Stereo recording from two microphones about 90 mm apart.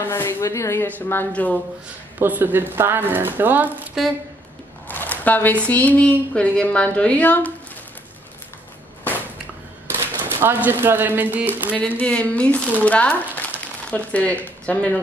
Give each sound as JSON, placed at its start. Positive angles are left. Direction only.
{"t": 0.0, "sound": "a woman's voice", "side_deg": 25}
{"t": 0.8, "sound": "a woman's voice", "side_deg": 20}
{"t": 2.1, "sound": "speech", "side_deg": -20}
{"t": 4.8, "sound": "a sound", "side_deg": 20}
{"t": 5.7, "sound": "a woman's voice", "side_deg": 15}
{"t": 9.8, "sound": "speech", "side_deg": -25}
{"t": 12.0, "sound": "a woman's voice", "side_deg": 15}
{"t": 13.4, "sound": "a sound", "side_deg": 15}